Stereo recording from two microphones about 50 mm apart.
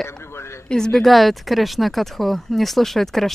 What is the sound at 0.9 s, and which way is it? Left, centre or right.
Speech, centre.